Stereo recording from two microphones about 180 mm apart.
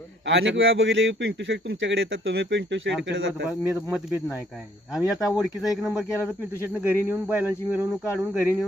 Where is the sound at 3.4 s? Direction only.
5° right (ahead or behind).